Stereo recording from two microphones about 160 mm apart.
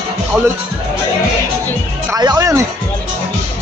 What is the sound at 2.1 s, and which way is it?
Speech, 20° right (ahead or behind).